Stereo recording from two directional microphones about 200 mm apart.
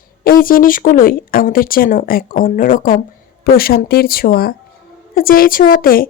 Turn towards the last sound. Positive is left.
turn(degrees=45)  # may be behind; listen again after turning